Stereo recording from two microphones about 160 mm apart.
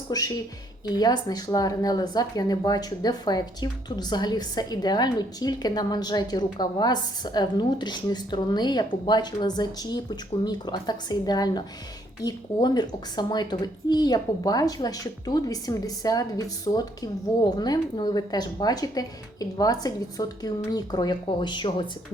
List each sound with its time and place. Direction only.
0.1 s speech: 25° left (ahead or behind)